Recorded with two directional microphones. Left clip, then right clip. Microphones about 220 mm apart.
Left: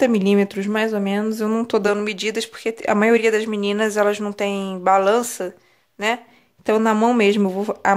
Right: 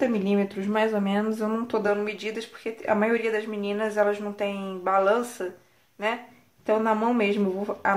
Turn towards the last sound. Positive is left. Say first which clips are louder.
# left 6 dB
turn(degrees=50)  # may be behind; listen again after turning